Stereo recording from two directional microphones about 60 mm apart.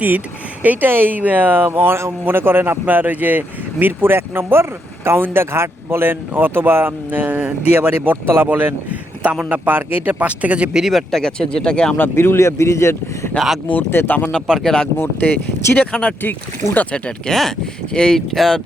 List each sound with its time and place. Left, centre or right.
0.6 s speech: right
10.8 s speech: centre
11.1 s speech: centre
11.9 s speech: left
13.9 s speech: left
14.3 s speech: centre
15.2 s speech: left
15.8 s speech: centre
16.9 s speech: centre